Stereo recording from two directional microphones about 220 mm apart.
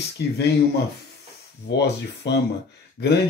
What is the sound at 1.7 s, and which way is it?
Speech, 50° left (ahead or behind).